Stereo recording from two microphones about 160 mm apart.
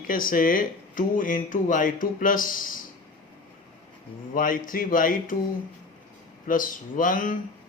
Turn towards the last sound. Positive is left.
turn(degrees=55)  # may be behind; listen again after turning